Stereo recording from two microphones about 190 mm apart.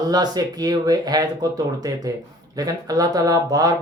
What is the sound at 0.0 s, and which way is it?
Speech, 20° right (ahead or behind).